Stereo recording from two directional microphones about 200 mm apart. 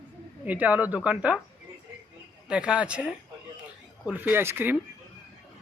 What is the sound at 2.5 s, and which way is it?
Speech, 5° right (ahead or behind).